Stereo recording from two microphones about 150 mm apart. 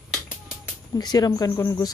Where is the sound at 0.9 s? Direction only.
25° left (ahead or behind).